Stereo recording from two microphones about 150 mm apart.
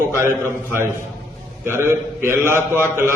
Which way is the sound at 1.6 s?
15° right (ahead or behind).